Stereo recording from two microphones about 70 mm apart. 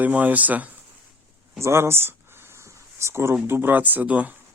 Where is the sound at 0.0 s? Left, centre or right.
Right.